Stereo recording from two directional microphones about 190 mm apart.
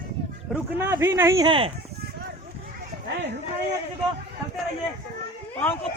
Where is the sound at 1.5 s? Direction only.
30° right (ahead or behind).